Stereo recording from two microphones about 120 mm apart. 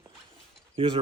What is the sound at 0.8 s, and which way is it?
Speech, 50° right (ahead or behind).